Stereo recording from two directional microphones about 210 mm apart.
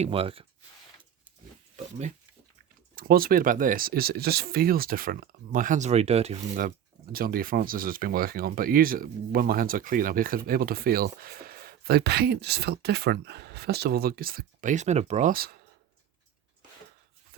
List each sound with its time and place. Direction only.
0.0 s speech: 25° right (ahead or behind)
1.7 s speech: 35° right (ahead or behind)
2.9 s speech: 45° right (ahead or behind)